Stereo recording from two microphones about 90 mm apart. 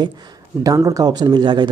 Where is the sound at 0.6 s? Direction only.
40° right (ahead or behind); by 1.6 s 55° right (ahead or behind).